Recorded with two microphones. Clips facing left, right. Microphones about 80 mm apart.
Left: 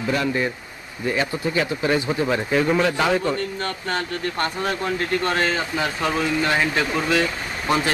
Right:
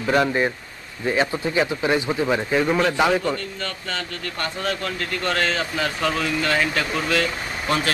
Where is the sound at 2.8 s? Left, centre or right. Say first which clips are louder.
Right 1 dB; right.